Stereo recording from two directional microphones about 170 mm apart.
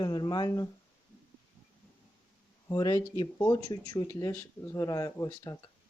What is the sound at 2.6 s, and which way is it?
Speech, 20° left (ahead or behind).